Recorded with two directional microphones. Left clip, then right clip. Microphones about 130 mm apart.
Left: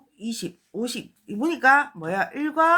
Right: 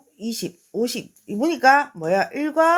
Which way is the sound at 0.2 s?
35° right (ahead or behind).